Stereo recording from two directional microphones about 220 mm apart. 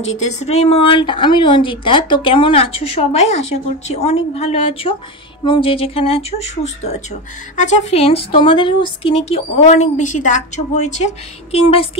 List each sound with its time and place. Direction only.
0.2 s speech: 30° left (ahead or behind)